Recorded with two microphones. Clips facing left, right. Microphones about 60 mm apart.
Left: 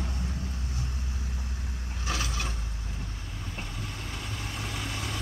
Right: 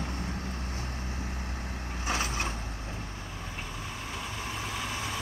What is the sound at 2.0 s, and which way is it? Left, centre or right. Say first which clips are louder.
Vehicle: right 2 dB; right.